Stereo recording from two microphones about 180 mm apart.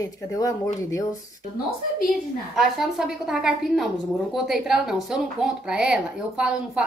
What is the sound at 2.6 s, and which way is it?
Speech, centre (ahead or behind).